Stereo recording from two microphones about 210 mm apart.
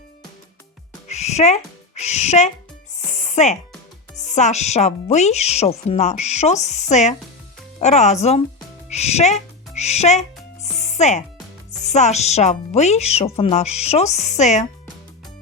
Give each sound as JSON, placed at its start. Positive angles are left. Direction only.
{"t": 1.0, "sound": "speech", "side_deg": 30}
{"t": 2.9, "sound": "music", "side_deg": 35}
{"t": 4.1, "sound": "speech", "side_deg": 35}
{"t": 8.9, "sound": "music", "side_deg": 30}
{"t": 11.7, "sound": "speech", "side_deg": 35}